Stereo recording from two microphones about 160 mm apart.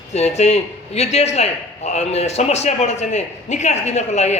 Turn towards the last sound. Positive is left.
turn(degrees=45)  # may be behind; listen again after turning